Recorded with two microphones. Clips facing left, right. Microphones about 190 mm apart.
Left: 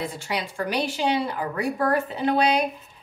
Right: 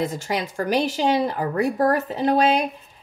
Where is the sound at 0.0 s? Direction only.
45° right (ahead or behind).